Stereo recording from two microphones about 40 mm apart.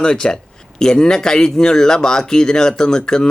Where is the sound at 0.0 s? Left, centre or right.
Centre.